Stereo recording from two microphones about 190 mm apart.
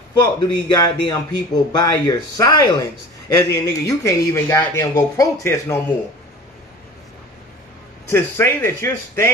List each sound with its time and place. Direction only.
0.2 s speech: 20° left (ahead or behind)
8.1 s speech: 15° left (ahead or behind)